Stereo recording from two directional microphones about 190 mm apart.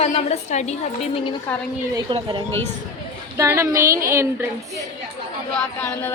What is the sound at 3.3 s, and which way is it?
A woman's voice, 15° right (ahead or behind).